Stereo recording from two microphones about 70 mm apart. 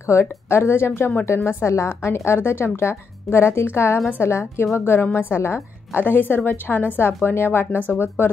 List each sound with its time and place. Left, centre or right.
0.0 s a woman's voice: left